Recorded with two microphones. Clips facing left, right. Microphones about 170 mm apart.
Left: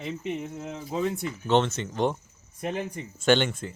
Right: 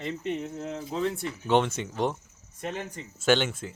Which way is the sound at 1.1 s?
10° right (ahead or behind).